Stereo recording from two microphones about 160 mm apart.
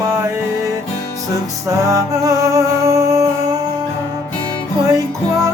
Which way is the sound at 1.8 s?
20° right (ahead or behind).